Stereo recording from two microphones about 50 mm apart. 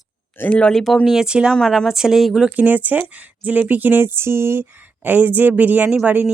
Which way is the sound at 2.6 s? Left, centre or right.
Right.